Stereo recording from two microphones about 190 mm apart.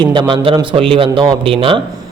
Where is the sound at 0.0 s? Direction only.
25° right (ahead or behind).